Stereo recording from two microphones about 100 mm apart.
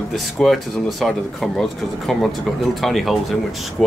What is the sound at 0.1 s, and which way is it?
Speech, centre (ahead or behind).